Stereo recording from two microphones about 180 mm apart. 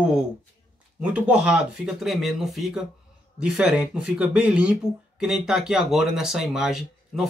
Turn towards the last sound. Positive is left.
turn(degrees=0)  # may be behind; listen again after turning